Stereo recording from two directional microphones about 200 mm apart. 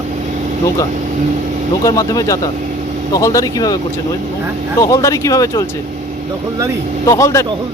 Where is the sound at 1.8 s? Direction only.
15° left (ahead or behind).